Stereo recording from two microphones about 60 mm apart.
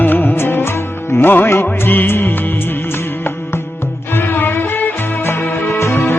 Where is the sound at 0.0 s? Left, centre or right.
Left.